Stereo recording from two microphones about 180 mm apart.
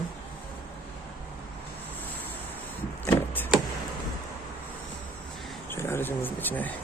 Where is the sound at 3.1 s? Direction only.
10° left (ahead or behind).